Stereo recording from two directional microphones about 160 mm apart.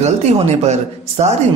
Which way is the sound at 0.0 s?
45° right (ahead or behind).